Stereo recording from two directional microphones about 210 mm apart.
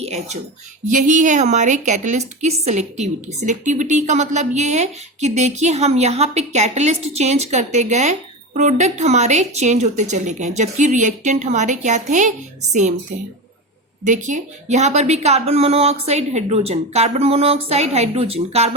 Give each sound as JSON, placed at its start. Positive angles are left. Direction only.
{"t": 0.0, "sound": "a woman's voice", "side_deg": -30}
{"t": 14.0, "sound": "a woman's voice", "side_deg": -35}